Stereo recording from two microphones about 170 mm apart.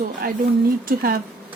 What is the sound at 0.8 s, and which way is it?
Speech, 60° right (ahead or behind).